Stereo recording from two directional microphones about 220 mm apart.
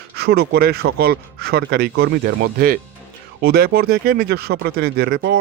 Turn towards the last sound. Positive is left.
turn(degrees=-45)  # may be behind; listen again after turning